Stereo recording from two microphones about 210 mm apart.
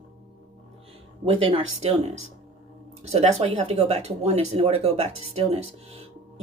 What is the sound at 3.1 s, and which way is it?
Speech, 30° right (ahead or behind).